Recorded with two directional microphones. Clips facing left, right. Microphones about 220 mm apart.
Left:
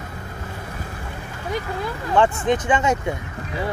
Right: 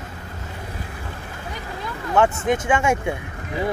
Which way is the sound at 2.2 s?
10° right (ahead or behind).